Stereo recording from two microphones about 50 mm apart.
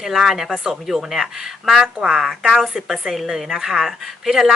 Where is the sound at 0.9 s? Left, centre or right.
Centre.